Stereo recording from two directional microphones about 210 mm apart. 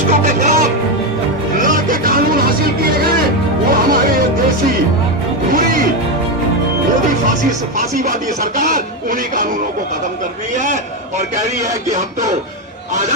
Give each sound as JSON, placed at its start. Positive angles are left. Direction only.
{"t": 0.1, "sound": "music", "side_deg": -35}
{"t": 3.7, "sound": "music", "side_deg": -45}
{"t": 5.5, "sound": "music", "side_deg": -40}
{"t": 7.8, "sound": "speech", "side_deg": -40}
{"t": 10.5, "sound": "a man's voice", "side_deg": -35}